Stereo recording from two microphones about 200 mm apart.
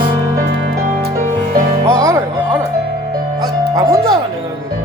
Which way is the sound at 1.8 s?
15° right (ahead or behind).